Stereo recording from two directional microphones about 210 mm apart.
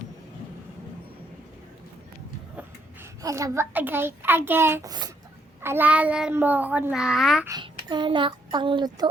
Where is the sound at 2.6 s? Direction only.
15° right (ahead or behind).